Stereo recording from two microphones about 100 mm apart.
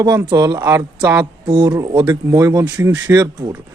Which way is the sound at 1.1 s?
45° right (ahead or behind).